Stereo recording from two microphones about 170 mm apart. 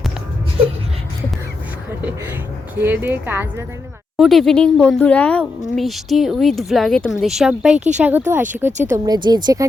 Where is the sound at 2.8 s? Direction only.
10° right (ahead or behind).